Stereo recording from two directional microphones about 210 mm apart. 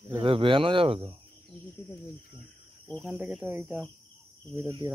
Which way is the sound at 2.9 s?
Centre (ahead or behind).